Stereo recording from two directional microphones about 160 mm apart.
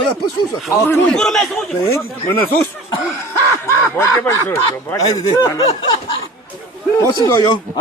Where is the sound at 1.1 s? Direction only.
5° left (ahead or behind).